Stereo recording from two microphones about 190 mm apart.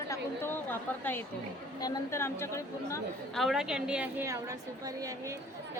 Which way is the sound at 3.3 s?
Centre (ahead or behind).